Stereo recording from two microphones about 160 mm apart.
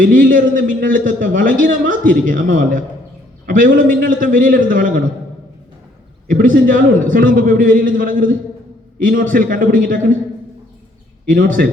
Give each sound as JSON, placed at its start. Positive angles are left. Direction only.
{"t": 0.0, "sound": "a man's voice", "side_deg": -60}
{"t": 6.2, "sound": "a man's voice", "side_deg": -55}
{"t": 11.3, "sound": "a man's voice", "side_deg": -55}